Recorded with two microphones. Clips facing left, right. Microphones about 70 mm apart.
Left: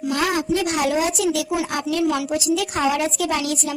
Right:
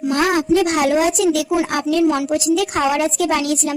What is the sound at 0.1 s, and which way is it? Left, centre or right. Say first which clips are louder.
A woman's voice: right 5 dB; right.